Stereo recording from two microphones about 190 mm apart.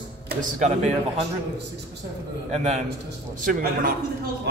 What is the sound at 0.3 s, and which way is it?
Speech, 40° right (ahead or behind).